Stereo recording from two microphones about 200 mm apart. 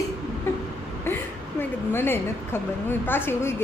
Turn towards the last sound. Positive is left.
turn(degrees=10)  # may be behind; listen again after turning